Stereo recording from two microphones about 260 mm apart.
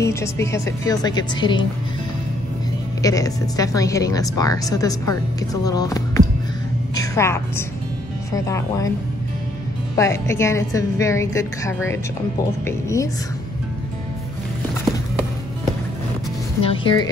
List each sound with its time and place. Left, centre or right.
0.0 s a woman's voice: centre
3.0 s a woman's voice: centre
9.9 s a woman's voice: centre
16.6 s speech: centre